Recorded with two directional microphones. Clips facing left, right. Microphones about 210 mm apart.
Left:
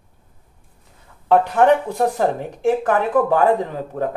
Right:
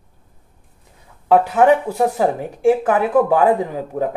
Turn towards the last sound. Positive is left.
turn(degrees=-10)  # may be behind; listen again after turning